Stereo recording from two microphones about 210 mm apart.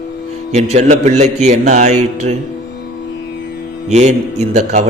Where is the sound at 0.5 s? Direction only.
35° right (ahead or behind).